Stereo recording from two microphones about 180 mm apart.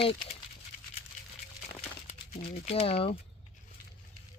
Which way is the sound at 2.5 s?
35° left (ahead or behind).